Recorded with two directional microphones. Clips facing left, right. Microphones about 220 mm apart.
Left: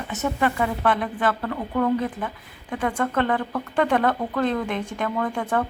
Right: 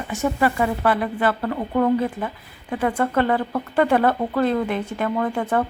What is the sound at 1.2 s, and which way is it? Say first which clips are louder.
Speech: right 2 dB; 25° right (ahead or behind).